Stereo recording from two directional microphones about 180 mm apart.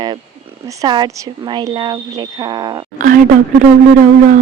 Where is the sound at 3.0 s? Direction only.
50° right (ahead or behind).